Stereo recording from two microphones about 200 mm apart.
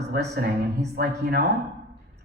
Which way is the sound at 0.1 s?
50° right (ahead or behind).